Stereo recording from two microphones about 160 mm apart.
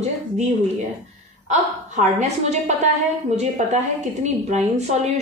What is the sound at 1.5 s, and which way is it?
A woman's voice, 45° right (ahead or behind).